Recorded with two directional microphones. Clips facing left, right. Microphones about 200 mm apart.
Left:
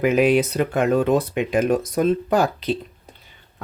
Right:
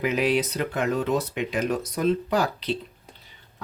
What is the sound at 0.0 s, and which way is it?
Speech, 50° left (ahead or behind).